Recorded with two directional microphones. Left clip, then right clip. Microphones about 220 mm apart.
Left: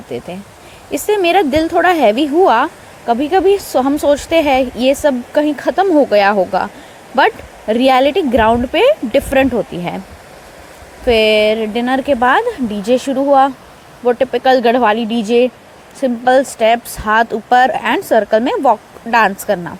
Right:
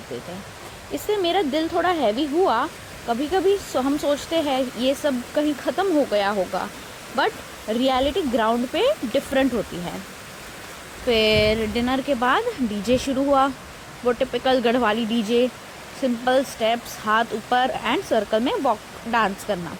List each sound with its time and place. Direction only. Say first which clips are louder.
0.1 s speech: left 9 dB; 20° left (ahead or behind)
11.0 s speech: left 8 dB; 10° left (ahead or behind)